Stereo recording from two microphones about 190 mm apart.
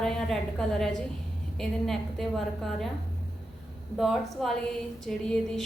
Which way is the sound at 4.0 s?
Centre (ahead or behind).